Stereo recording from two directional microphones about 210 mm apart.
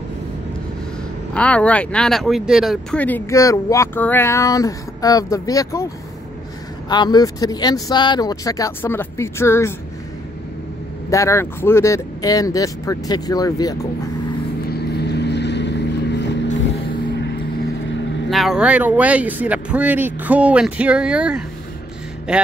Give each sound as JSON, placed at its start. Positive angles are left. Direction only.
{"t": 1.3, "sound": "speech", "side_deg": 5}
{"t": 6.9, "sound": "speech", "side_deg": 20}
{"t": 11.1, "sound": "speech", "side_deg": 15}
{"t": 14.7, "sound": "vehicle", "side_deg": 50}
{"t": 18.3, "sound": "speech", "side_deg": 0}